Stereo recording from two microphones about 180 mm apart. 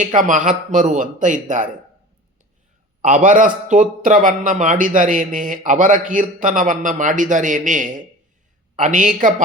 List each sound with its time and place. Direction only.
0.2 s a man's voice: 45° right (ahead or behind)
3.0 s a man's voice: 50° right (ahead or behind)